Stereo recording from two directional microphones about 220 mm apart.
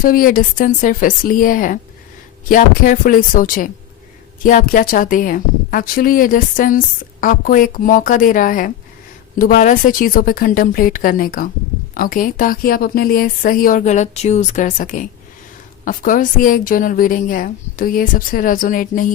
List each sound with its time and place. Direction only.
0.0 s a woman's voice: 40° left (ahead or behind)